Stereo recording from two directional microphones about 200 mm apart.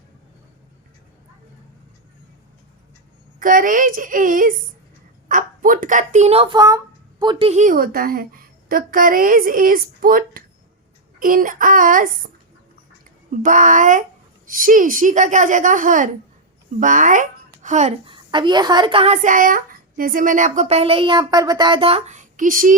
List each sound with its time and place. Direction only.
3.4 s a woman's voice: 45° right (ahead or behind)
13.4 s a child's voice: 40° right (ahead or behind)